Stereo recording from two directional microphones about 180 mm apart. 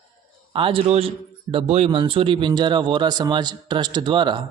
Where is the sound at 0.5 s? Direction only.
30° right (ahead or behind).